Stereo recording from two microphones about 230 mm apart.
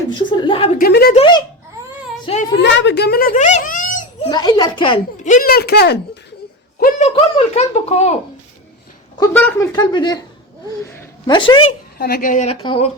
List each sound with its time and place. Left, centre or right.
0.1 s speech: centre
0.8 s a woman's voice: left
1.1 s speech: left
2.2 s a sound: left
2.6 s a child's voice: left
4.3 s speech: centre
5.2 s speech: left
6.7 s a sound: left
7.2 s speech: left
9.3 s speech: centre
9.7 s a woman's voice: centre
11.9 s speech: left
12.6 s speech: left